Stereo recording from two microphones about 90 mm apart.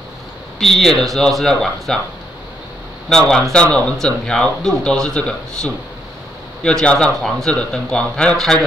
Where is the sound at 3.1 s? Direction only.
10° left (ahead or behind).